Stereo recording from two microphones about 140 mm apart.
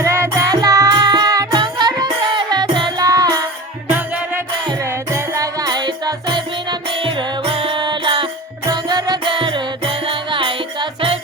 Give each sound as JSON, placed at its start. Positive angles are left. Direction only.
{"t": 0.0, "sound": "music", "side_deg": -20}
{"t": 3.8, "sound": "music", "side_deg": -10}
{"t": 5.1, "sound": "music", "side_deg": -20}